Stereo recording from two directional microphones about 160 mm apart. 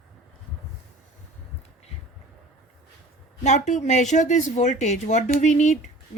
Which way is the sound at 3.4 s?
45° left (ahead or behind).